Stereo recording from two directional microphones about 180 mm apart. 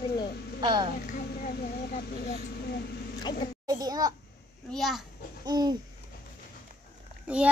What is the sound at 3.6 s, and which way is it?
Speech, 20° right (ahead or behind).